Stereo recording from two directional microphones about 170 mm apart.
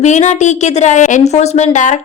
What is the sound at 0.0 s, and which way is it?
A woman's voice, 45° left (ahead or behind).